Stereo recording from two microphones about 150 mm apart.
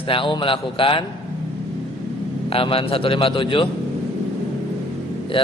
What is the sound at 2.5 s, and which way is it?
A man's voice, 40° left (ahead or behind).